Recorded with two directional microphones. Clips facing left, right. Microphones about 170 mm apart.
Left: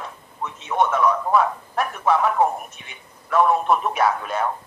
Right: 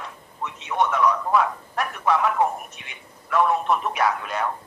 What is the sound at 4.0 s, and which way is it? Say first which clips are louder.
Speech: left 2 dB; 30° left (ahead or behind).